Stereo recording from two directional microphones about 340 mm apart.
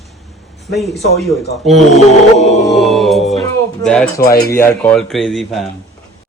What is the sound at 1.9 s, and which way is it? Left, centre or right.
Music, centre.